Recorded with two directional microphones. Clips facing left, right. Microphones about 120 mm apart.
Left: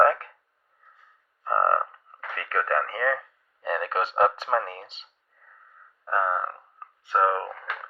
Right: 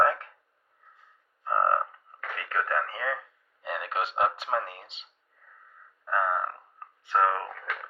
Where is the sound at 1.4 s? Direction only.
45° left (ahead or behind).